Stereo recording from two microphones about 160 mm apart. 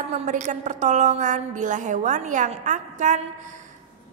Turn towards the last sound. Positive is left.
turn(degrees=-50)  # may be behind; listen again after turning